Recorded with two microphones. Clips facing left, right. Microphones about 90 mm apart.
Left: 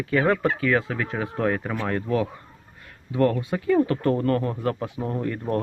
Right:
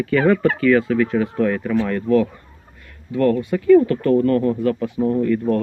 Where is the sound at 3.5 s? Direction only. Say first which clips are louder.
Right 8 dB; 25° left (ahead or behind).